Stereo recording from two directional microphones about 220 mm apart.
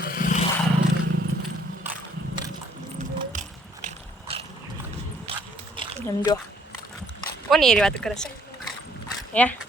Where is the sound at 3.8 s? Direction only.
25° right (ahead or behind).